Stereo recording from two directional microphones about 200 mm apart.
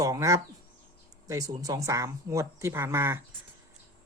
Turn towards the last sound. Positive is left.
turn(degrees=-15)  # may be behind; listen again after turning